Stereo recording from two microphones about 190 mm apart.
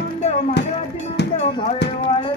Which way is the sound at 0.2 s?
35° left (ahead or behind).